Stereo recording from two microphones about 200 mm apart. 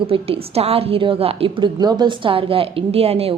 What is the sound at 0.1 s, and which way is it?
A woman's voice, 30° right (ahead or behind).